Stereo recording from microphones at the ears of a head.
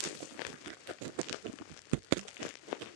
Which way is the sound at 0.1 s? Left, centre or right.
Left.